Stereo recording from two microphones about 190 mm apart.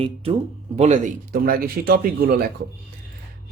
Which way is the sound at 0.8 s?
40° right (ahead or behind).